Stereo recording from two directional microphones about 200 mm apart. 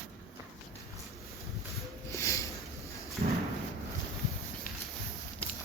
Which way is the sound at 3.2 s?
40° right (ahead or behind).